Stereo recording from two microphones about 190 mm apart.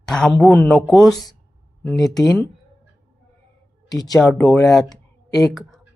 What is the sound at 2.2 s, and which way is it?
Speech, 20° left (ahead or behind).